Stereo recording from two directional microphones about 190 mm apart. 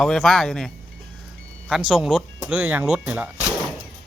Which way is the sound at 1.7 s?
5° right (ahead or behind).